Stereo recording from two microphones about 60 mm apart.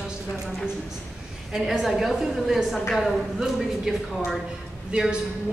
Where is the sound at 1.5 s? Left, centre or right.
Centre.